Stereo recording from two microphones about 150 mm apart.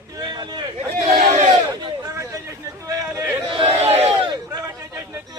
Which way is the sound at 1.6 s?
25° right (ahead or behind).